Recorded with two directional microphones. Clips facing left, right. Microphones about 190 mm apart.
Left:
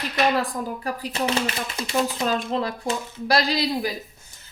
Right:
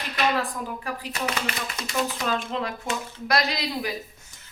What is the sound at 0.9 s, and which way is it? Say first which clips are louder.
A woman's voice: left 5 dB; 35° left (ahead or behind).